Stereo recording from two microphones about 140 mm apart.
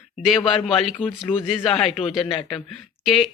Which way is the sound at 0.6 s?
Centre (ahead or behind).